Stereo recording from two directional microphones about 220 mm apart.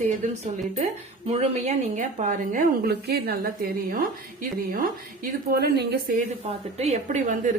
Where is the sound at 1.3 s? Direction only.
30° right (ahead or behind).